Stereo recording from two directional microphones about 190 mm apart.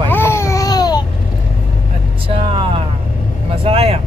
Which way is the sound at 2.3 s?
25° right (ahead or behind).